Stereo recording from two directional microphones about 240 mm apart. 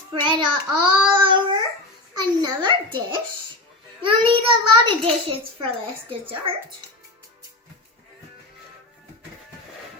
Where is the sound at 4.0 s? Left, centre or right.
Right.